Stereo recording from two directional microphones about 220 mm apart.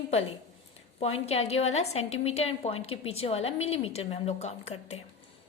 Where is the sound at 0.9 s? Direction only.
25° left (ahead or behind).